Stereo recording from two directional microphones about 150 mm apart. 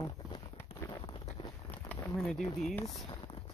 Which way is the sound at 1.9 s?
5° left (ahead or behind).